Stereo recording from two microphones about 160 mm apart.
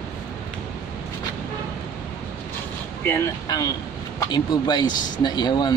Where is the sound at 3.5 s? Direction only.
20° left (ahead or behind).